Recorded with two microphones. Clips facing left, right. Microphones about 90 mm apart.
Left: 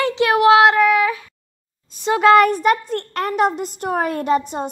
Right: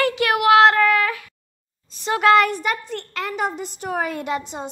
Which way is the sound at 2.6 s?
50° left (ahead or behind).